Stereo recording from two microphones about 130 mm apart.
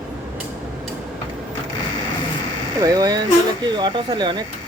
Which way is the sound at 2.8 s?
30° right (ahead or behind).